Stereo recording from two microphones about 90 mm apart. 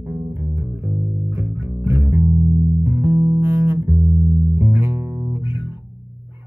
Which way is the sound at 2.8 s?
25° right (ahead or behind).